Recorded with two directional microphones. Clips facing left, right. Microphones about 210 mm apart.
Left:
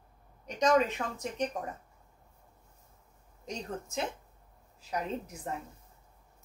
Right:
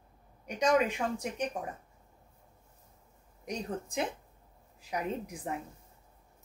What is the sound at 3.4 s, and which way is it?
Speech, 15° right (ahead or behind).